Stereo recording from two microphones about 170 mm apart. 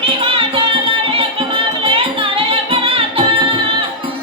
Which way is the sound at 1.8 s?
30° right (ahead or behind).